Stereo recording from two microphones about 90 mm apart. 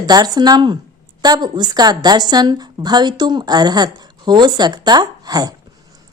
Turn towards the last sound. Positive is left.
turn(degrees=-45)  # may be behind; listen again after turning